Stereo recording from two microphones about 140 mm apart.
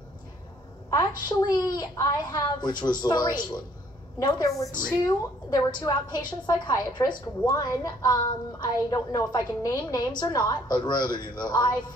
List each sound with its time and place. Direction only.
0.8 s a woman's voice: 30° left (ahead or behind)